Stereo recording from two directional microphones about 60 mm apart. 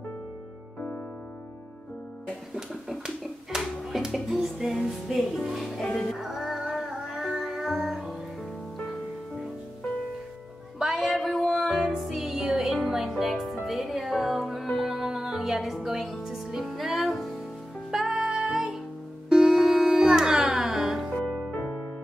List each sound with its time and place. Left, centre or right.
0.7 s music: left
2.5 s a sound: centre
3.5 s music: centre
5.8 s music: centre
6.1 s music: centre
10.8 s music: centre
21.1 s music: centre